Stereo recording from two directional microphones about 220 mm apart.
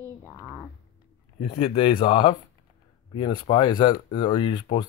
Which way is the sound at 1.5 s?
25° left (ahead or behind).